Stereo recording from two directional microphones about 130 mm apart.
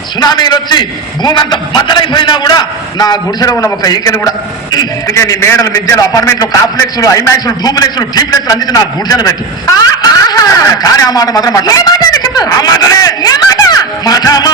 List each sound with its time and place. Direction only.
0.2 s a man's voice: 35° left (ahead or behind)